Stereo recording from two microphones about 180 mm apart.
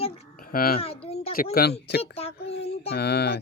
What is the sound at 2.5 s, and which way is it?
Female singing, 35° left (ahead or behind).